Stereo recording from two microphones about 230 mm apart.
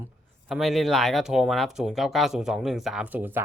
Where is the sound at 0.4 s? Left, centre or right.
Centre.